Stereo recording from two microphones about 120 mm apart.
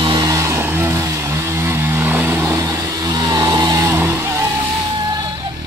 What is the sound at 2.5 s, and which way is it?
Vehicle, 30° right (ahead or behind).